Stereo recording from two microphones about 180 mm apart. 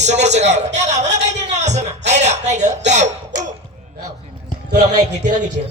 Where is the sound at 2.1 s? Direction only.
40° right (ahead or behind).